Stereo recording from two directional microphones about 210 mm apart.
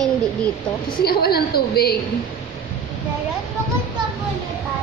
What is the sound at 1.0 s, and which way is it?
Speech, 45° left (ahead or behind).